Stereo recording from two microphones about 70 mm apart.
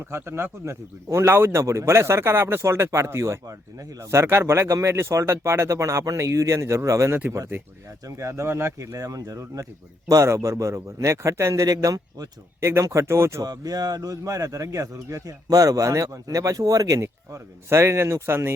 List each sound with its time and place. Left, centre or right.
0.0 s a man's voice: right
12.5 s a man's voice: right
13.4 s speech: right